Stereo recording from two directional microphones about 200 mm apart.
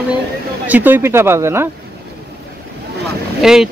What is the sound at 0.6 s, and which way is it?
Speech, 10° right (ahead or behind).